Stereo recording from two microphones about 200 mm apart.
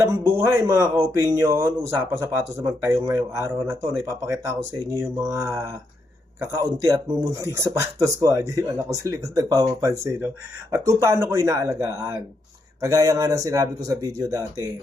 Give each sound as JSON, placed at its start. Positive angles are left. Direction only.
{"t": 0.0, "sound": "speech", "side_deg": -15}